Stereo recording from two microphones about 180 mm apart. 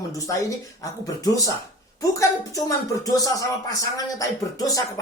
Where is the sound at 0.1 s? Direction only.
20° left (ahead or behind).